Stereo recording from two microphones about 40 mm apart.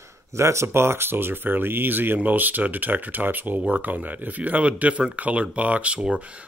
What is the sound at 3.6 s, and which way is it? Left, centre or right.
Speech, right.